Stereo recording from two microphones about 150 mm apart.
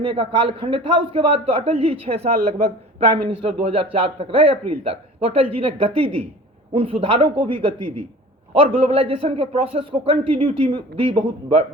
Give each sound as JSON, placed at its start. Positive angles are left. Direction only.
{"t": 0.0, "sound": "a man's voice", "side_deg": -35}